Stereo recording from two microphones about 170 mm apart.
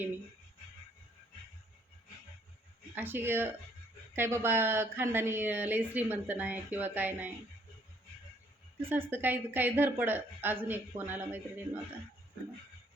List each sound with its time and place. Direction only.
2.9 s speech: 10° right (ahead or behind)
8.9 s speech: 10° right (ahead or behind)